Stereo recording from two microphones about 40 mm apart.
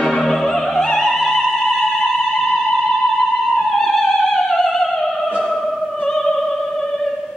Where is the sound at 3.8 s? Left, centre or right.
Centre.